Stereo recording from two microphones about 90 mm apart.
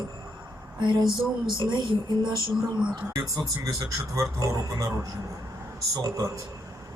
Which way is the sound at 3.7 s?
35° right (ahead or behind).